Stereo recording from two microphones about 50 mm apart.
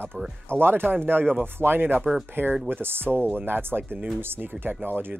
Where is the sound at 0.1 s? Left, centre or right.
Right.